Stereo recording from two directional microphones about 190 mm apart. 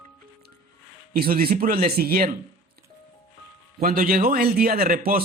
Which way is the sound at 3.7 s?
50° right (ahead or behind).